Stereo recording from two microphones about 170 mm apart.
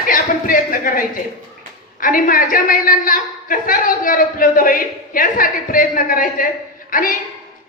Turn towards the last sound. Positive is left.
turn(degrees=55)  # may be behind; listen again after turning